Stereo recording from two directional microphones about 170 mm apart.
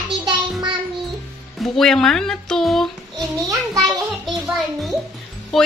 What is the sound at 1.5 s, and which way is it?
A child's voice, centre (ahead or behind).